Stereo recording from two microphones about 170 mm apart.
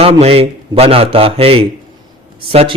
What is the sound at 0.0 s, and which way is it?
A man's voice, 35° right (ahead or behind).